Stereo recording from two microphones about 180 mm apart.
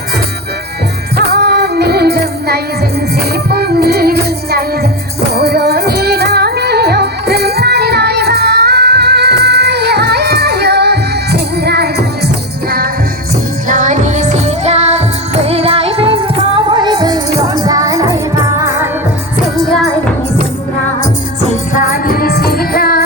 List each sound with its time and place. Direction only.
1.1 s music: 65° right (ahead or behind)
13.7 s music: 45° right (ahead or behind); by 18.9 s 15° right (ahead or behind)
19.5 s music: centre (ahead or behind)
21.5 s music: 45° left (ahead or behind)